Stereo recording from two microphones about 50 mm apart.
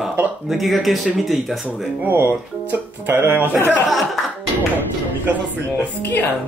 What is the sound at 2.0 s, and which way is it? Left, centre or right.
Speech, right.